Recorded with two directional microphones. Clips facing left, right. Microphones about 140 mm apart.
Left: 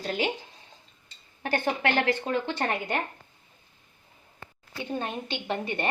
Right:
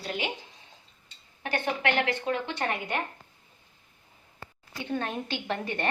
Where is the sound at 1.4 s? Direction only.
35° left (ahead or behind).